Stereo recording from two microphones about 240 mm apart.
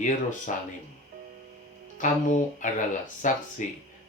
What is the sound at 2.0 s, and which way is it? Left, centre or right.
Speech, left.